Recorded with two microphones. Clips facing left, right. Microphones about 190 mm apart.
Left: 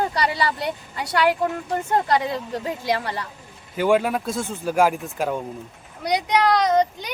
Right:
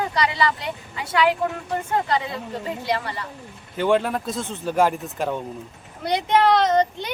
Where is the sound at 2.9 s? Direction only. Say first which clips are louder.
Left 2 dB; 45° left (ahead or behind).